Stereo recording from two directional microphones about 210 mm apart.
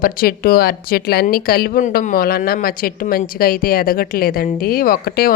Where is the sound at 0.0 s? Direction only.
45° left (ahead or behind).